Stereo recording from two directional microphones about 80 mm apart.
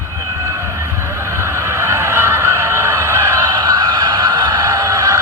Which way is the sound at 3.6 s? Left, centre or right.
Right.